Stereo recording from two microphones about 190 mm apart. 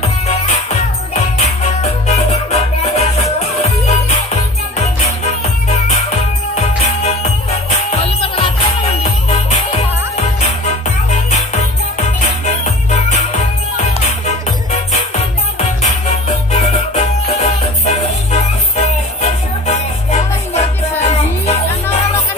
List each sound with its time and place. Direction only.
1.1 s music: 35° left (ahead or behind)
6.5 s music: 35° left (ahead or behind)
9.7 s music: 30° left (ahead or behind)
12.9 s music: 35° left (ahead or behind)
16.5 s music: 35° left (ahead or behind)